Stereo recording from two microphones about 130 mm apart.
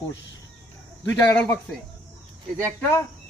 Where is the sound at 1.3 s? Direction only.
10° left (ahead or behind).